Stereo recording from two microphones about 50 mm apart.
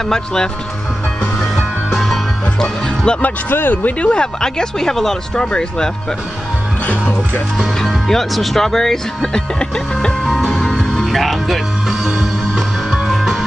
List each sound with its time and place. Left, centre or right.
0.0 s speech: centre
1.4 s music: centre
3.2 s speech: left
4.1 s speech: centre
6.9 s speech: left
8.1 s speech: centre
10.0 s music: centre
11.1 s music: centre